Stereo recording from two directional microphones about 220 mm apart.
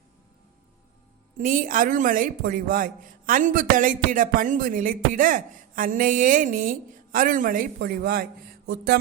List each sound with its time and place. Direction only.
1.4 s a woman's voice: 40° right (ahead or behind)